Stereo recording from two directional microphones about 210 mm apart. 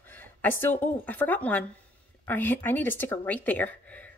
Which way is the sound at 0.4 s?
10° left (ahead or behind).